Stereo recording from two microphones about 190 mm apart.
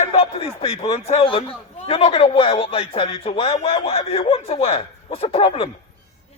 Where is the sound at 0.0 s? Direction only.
30° left (ahead or behind).